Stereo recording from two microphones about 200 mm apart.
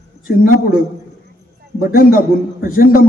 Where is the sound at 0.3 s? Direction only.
45° left (ahead or behind).